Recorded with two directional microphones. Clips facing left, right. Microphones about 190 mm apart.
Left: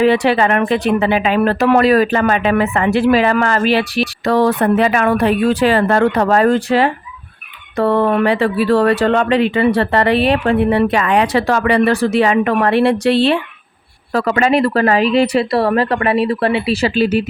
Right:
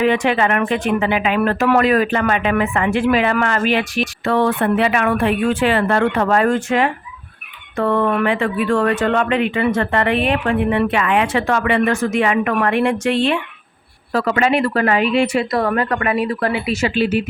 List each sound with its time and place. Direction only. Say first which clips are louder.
0.0 s speech: left 3 dB; 35° left (ahead or behind)